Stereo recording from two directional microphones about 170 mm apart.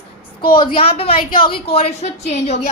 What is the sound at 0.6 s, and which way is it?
A woman's voice, 35° left (ahead or behind).